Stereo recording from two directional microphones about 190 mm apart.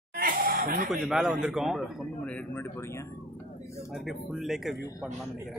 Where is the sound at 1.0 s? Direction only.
Centre (ahead or behind); by 3.2 s 15° left (ahead or behind).